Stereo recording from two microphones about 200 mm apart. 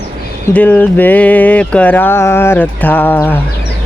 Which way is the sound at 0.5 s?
10° left (ahead or behind).